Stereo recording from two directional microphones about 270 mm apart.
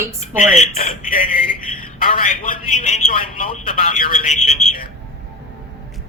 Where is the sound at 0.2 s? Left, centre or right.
Left.